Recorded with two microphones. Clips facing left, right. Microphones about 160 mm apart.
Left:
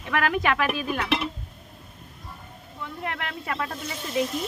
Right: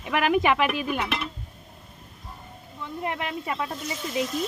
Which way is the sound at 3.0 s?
20° right (ahead or behind).